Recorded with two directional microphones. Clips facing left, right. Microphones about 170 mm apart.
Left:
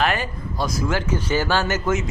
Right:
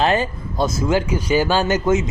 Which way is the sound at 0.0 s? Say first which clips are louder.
Right 4 dB; 25° right (ahead or behind).